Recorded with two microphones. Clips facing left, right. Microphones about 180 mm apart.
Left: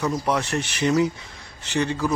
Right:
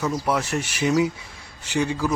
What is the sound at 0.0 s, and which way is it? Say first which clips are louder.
A man's voice: even; 5° right (ahead or behind).